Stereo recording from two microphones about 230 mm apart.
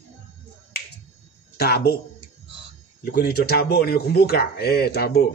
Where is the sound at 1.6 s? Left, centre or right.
Left.